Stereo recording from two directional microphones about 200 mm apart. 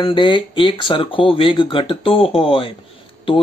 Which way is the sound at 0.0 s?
25° left (ahead or behind).